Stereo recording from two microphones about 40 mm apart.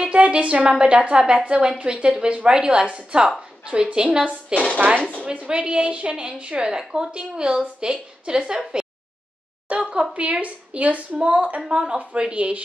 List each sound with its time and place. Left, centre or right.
0.0 s a woman's voice: right
4.7 s a woman's voice: right
6.8 s speech: centre
7.1 s speech: right
9.8 s a sound: right
10.1 s a woman's voice: right